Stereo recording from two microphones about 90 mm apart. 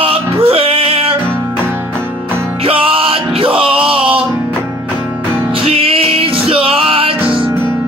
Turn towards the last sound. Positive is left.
turn(degrees=-85)